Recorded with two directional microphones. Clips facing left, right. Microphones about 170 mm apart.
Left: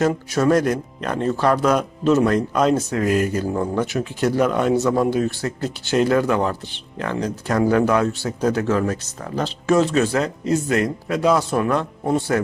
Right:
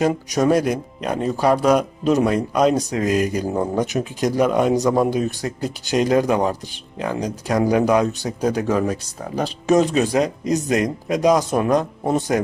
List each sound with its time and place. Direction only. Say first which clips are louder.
0.0 s speech: even; 15° right (ahead or behind)